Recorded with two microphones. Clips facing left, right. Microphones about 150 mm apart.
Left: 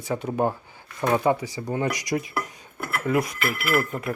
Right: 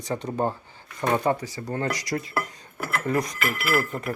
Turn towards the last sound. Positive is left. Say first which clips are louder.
# left 1 dB
turn(degrees=15)  # may be behind; listen again after turning